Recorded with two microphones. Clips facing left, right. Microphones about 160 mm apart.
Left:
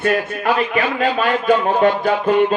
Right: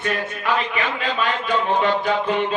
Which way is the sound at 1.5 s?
45° left (ahead or behind).